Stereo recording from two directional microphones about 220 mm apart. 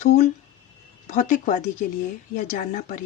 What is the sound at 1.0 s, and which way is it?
Speech, 35° left (ahead or behind).